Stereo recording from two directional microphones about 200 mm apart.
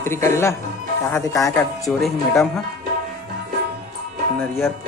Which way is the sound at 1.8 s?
Centre (ahead or behind).